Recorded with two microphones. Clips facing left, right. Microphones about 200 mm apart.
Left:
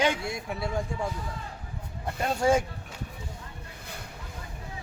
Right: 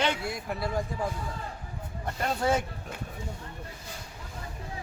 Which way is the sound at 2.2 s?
10° left (ahead or behind).